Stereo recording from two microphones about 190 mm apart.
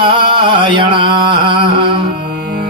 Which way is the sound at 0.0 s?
25° right (ahead or behind).